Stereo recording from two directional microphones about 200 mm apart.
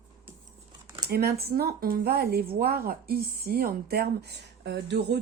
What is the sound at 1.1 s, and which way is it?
A woman's voice, 50° right (ahead or behind).